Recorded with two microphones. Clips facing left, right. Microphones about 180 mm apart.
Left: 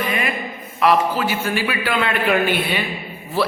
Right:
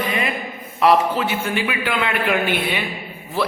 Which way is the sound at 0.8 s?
25° right (ahead or behind).